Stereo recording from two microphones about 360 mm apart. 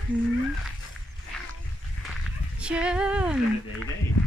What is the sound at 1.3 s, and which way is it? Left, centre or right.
Wild animals, centre.